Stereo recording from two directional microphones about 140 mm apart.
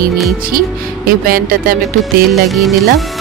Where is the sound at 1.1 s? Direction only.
90° right.